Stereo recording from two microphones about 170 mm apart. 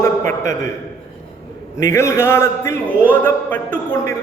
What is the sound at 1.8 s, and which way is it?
A man's voice, 15° left (ahead or behind).